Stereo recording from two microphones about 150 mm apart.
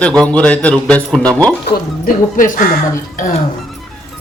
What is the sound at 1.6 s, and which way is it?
Speech, 65° left (ahead or behind).